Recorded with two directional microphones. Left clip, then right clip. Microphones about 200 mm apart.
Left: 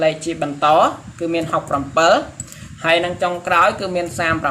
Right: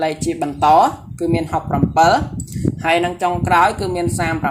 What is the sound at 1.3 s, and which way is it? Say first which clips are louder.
Speech: left 1 dB; 25° right (ahead or behind).